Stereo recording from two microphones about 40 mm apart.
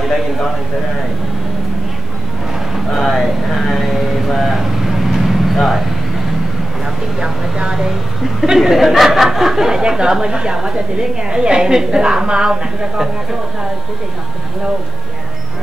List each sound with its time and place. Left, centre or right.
2.9 s speech: centre
7.2 s speech: right